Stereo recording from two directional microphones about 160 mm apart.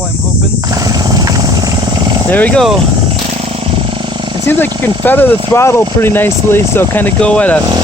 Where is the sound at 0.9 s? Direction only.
25° right (ahead or behind).